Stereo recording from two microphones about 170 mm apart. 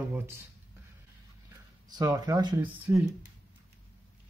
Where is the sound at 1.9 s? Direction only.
25° right (ahead or behind).